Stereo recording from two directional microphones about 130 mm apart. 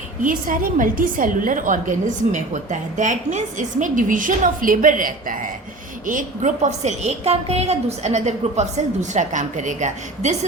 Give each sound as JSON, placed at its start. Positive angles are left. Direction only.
{"t": 0.2, "sound": "a woman's voice", "side_deg": -90}
{"t": 6.1, "sound": "a woman's voice", "side_deg": -80}